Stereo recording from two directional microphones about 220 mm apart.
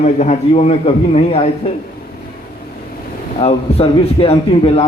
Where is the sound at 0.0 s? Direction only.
30° left (ahead or behind).